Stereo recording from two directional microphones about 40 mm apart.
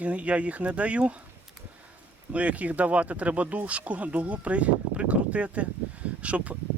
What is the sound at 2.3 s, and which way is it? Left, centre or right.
Speech, right.